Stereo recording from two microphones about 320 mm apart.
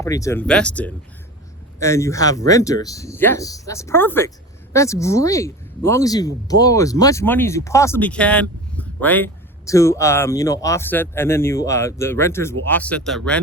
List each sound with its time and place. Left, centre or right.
0.0 s speech: centre